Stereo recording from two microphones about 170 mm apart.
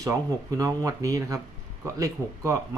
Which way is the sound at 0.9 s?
20° right (ahead or behind).